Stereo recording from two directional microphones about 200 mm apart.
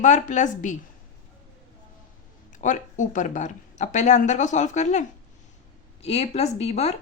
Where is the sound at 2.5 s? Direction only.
40° left (ahead or behind).